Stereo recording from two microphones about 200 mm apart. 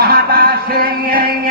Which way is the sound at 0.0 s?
50° right (ahead or behind).